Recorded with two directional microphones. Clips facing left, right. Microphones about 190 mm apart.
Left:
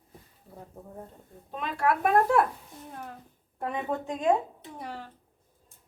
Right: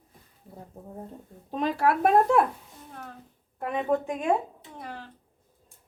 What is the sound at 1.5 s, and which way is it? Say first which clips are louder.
Speech: right 3 dB; 35° right (ahead or behind).